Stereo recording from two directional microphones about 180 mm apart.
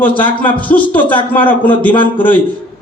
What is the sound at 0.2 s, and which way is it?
A man's voice, 10° left (ahead or behind).